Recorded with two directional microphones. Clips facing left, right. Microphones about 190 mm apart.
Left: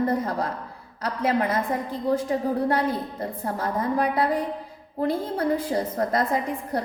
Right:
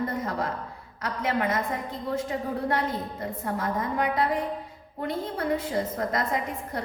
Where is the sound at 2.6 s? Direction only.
30° left (ahead or behind).